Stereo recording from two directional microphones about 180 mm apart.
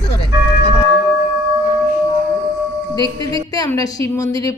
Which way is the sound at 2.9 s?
20° left (ahead or behind).